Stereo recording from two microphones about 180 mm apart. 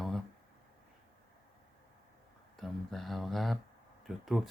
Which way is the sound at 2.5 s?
Centre (ahead or behind).